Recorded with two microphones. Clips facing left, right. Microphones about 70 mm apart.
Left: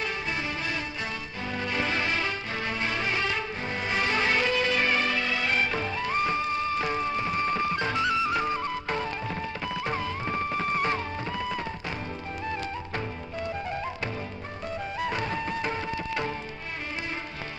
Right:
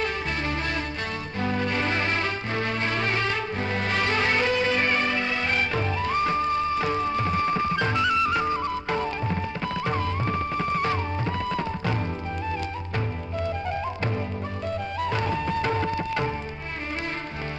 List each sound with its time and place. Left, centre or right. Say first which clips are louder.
1.7 s music: right 2 dB; centre
2.1 s music: right 3 dB; centre
3.1 s music: right 2 dB; centre
4.2 s music: right 2 dB; centre
8.4 s music: right 3 dB; centre
14.9 s music: right 3 dB; centre